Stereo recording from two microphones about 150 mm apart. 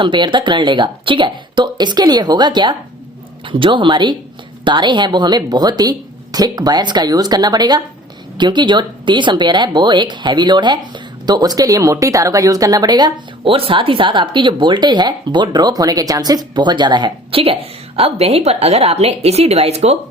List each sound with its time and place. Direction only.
0.0 s speech: 30° right (ahead or behind)